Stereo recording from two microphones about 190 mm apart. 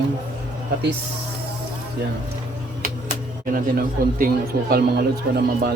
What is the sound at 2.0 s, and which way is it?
Speech, 60° right (ahead or behind).